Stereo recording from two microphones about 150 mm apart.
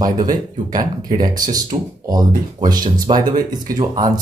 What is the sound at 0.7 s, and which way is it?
Speech, 25° right (ahead or behind).